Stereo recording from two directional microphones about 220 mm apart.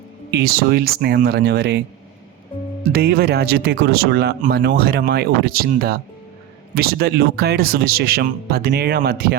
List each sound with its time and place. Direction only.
0.3 s speech: 45° right (ahead or behind)
2.9 s speech: 45° right (ahead or behind)